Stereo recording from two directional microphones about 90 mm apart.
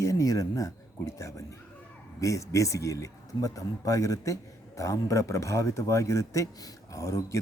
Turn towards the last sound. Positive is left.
turn(degrees=35)  # may be behind; listen again after turning